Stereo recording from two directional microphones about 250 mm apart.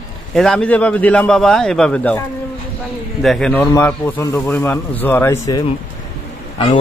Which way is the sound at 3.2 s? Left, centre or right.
Centre.